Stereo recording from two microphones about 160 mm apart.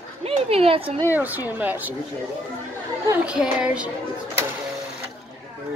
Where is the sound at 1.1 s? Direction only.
10° right (ahead or behind).